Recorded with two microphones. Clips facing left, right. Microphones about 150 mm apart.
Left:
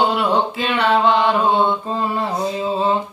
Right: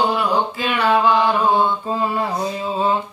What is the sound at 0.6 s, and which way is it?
Mantra, 10° right (ahead or behind).